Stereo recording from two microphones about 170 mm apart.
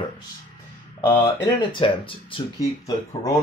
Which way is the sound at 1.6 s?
30° left (ahead or behind).